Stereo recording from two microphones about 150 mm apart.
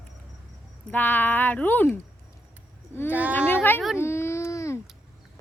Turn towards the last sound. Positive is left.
turn(degrees=20)  # may be behind; listen again after turning